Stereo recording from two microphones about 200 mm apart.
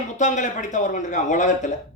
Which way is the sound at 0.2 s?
40° left (ahead or behind).